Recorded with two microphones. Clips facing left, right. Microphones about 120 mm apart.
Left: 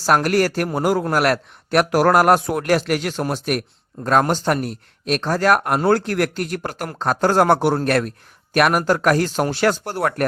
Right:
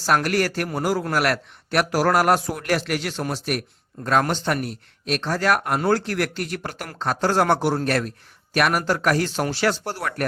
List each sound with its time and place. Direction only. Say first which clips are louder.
0.0 s speech: left 4 dB; 40° left (ahead or behind)
0.8 s speech: left 4 dB; 55° left (ahead or behind)
1.1 s speech: left 4 dB; 45° left (ahead or behind)
4.0 s speech: left 4 dB; 40° left (ahead or behind)